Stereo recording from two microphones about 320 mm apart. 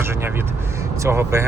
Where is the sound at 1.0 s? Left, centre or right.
Centre.